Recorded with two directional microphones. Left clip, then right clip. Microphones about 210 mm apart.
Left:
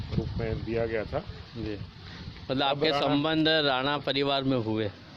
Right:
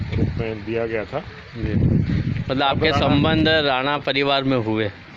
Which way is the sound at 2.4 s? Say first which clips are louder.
Right 7 dB; centre (ahead or behind).